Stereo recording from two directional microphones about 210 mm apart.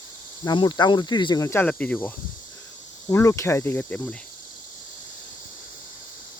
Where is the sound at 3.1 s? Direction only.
15° left (ahead or behind).